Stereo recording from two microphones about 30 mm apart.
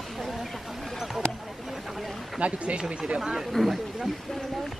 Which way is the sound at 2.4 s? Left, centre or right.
Right.